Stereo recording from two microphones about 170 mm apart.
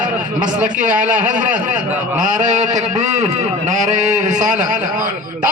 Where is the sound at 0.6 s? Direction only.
50° right (ahead or behind).